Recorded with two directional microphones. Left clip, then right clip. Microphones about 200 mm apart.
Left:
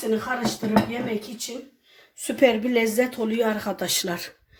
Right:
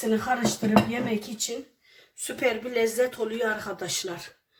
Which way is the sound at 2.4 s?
30° left (ahead or behind).